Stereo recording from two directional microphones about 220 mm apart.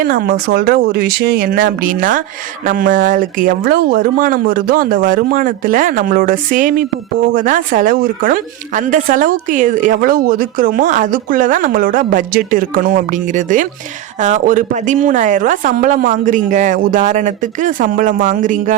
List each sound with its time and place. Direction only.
0.0 s a woman's voice: 40° right (ahead or behind)